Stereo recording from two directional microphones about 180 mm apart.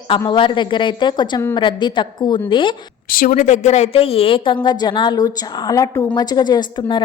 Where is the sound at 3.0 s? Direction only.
50° left (ahead or behind).